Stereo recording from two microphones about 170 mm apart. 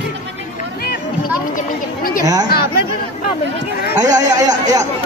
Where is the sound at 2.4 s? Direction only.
65° left (ahead or behind).